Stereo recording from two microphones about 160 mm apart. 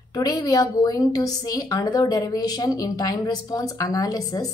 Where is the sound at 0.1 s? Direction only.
25° left (ahead or behind).